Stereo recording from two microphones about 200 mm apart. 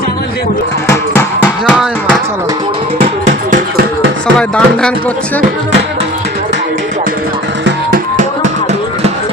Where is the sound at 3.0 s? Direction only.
35° right (ahead or behind).